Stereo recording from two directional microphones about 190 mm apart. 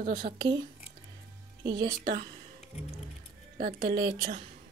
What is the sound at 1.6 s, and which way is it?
Speech, 20° right (ahead or behind).